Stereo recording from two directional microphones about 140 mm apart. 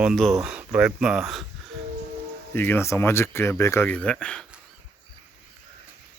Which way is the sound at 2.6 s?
15° left (ahead or behind).